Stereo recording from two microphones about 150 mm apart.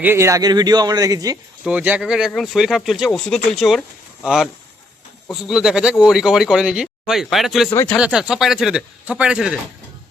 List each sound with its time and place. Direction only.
0.0 s speech: 15° right (ahead or behind)
1.6 s speech: 10° right (ahead or behind)
7.7 s speech: 20° left (ahead or behind)
7.9 s speech: 5° right (ahead or behind)